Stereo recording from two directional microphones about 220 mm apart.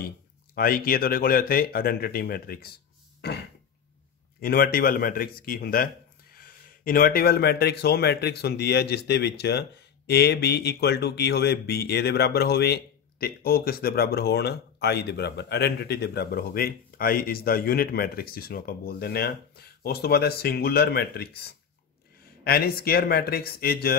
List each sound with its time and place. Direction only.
0.6 s speech: 40° left (ahead or behind)
4.4 s speech: 45° left (ahead or behind)